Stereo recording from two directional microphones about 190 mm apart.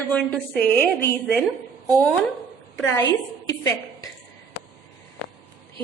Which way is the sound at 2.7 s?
15° left (ahead or behind).